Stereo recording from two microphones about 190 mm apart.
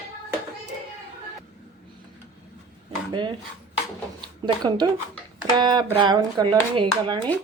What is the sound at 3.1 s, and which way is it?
Dishes, 25° right (ahead or behind).